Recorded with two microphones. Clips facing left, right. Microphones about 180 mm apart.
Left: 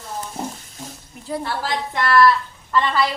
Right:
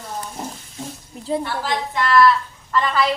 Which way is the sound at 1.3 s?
25° right (ahead or behind).